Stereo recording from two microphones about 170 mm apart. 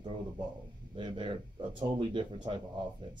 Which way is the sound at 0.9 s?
30° right (ahead or behind).